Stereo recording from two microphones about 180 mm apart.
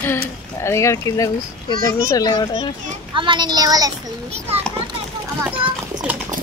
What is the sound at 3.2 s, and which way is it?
Speech, 25° right (ahead or behind).